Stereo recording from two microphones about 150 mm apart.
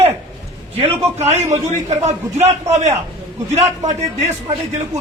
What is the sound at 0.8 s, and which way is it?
A man's voice, 45° right (ahead or behind).